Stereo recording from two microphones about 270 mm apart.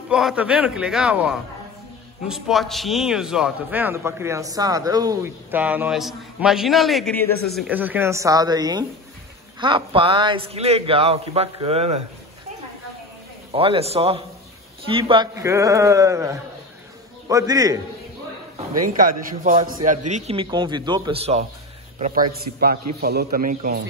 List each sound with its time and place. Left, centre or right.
0.1 s a man's voice: centre
7.5 s a man's voice: centre; by 12.0 s right
13.5 s a man's voice: right
18.9 s a man's voice: right